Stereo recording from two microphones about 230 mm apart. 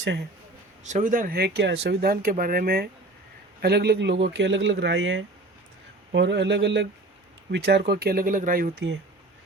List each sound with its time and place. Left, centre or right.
0.9 s speech: right